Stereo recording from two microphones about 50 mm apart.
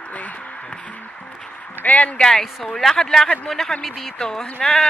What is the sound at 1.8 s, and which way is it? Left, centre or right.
Speech, left.